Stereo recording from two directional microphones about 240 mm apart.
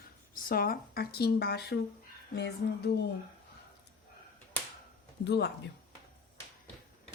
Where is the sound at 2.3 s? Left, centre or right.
Left.